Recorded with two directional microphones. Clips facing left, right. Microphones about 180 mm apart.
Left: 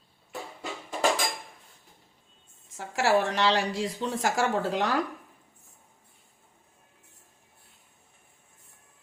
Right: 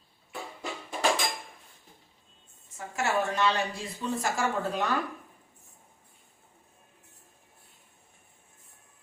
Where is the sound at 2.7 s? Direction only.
90° left.